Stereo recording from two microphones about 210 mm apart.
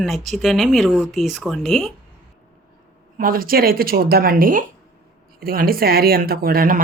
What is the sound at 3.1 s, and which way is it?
Speech, 45° right (ahead or behind).